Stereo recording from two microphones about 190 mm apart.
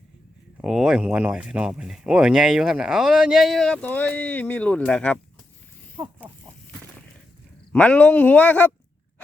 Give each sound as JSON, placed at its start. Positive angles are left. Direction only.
{"t": 0.6, "sound": "speech", "side_deg": 0}
{"t": 6.0, "sound": "a sound", "side_deg": -10}
{"t": 7.7, "sound": "speech", "side_deg": 5}